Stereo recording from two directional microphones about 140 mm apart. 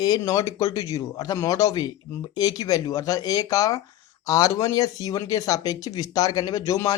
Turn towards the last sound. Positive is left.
turn(degrees=25)  # may be behind; listen again after turning